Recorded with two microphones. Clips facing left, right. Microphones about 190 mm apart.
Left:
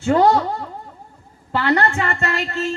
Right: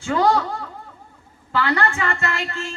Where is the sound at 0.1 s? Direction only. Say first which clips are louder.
Left 4 dB; 35° left (ahead or behind).